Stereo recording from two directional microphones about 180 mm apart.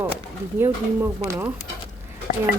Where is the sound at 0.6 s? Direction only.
15° right (ahead or behind).